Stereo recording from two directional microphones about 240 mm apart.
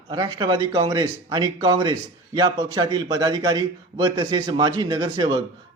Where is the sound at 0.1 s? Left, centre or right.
Centre.